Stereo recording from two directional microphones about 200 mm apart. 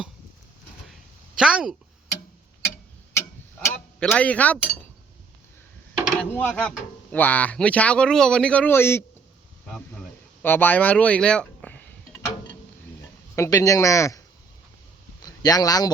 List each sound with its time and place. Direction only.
1.4 s speech: 5° right (ahead or behind)
3.7 s speech: 5° left (ahead or behind)
6.1 s speech: 5° left (ahead or behind)
9.6 s a sound: 5° left (ahead or behind)
13.3 s speech: 15° left (ahead or behind)
15.2 s speech: 20° left (ahead or behind)